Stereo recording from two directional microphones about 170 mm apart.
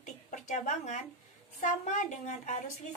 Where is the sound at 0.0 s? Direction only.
45° left (ahead or behind).